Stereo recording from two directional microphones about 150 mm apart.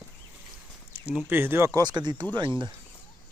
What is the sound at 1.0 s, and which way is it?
Speech, 10° right (ahead or behind).